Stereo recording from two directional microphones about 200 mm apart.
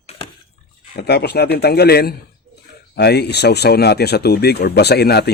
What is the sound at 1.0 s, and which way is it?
Speech, 55° left (ahead or behind).